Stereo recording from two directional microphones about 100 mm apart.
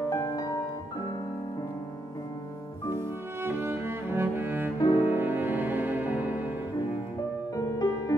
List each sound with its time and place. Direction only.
0.0 s music: 35° left (ahead or behind)
3.4 s cello: 25° right (ahead or behind)
4.7 s cello: 50° left (ahead or behind)
5.0 s music: 20° right (ahead or behind)